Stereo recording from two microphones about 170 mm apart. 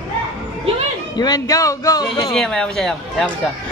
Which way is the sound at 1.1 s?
25° left (ahead or behind).